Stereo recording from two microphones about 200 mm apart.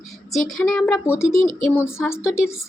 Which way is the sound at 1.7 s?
10° left (ahead or behind).